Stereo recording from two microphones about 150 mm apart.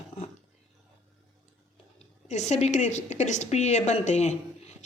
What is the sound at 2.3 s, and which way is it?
Speech, 50° left (ahead or behind).